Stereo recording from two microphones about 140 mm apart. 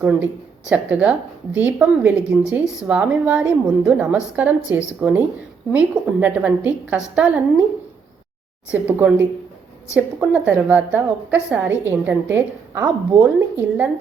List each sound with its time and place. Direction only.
0.0 s a woman's voice: 10° right (ahead or behind)
8.7 s a woman's voice: 15° right (ahead or behind)